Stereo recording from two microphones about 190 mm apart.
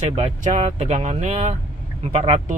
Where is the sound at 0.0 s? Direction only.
35° right (ahead or behind).